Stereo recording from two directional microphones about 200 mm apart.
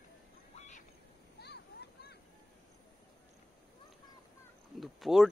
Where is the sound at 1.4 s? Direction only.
55° left (ahead or behind).